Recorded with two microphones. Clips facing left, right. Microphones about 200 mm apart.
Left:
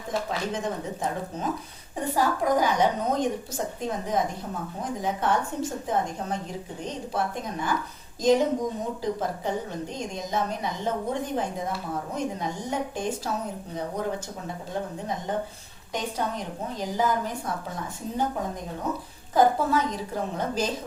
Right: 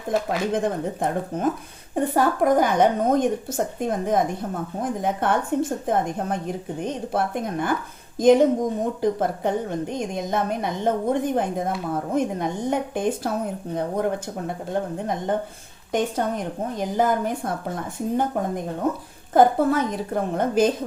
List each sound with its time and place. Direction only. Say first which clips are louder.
0.3 s a woman's voice: right 6 dB; 55° right (ahead or behind)
18.8 s a woman's voice: right 6 dB; 55° right (ahead or behind)